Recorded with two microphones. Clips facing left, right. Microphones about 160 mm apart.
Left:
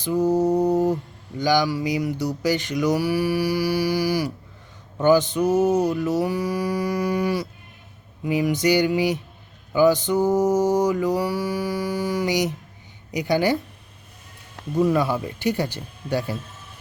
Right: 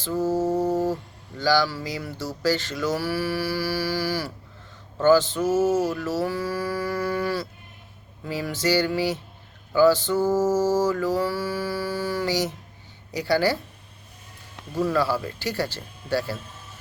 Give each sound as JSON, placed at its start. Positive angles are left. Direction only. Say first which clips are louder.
{"t": 0.0, "sound": "mantra", "louder": "left 4 dB", "side_deg": 15}
{"t": 1.4, "sound": "speech", "louder": "left 2 dB", "side_deg": 15}
{"t": 14.8, "sound": "speech", "louder": "left 3 dB", "side_deg": 20}